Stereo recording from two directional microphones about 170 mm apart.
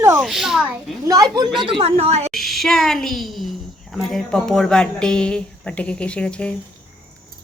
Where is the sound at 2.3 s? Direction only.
Centre (ahead or behind).